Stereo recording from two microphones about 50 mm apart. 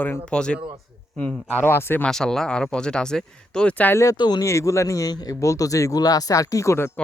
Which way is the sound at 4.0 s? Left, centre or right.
Left.